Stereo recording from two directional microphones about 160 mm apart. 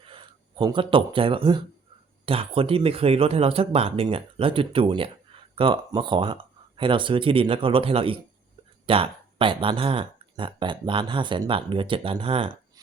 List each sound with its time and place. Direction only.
0.1 s speech: 30° right (ahead or behind)